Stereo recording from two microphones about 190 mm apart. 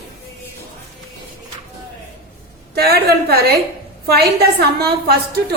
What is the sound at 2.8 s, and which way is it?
A woman's voice, 55° right (ahead or behind).